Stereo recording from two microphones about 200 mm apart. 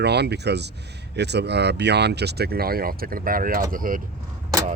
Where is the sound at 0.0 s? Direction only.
55° right (ahead or behind).